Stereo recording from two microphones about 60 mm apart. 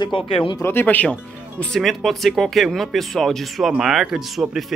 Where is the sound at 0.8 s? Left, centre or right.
Left.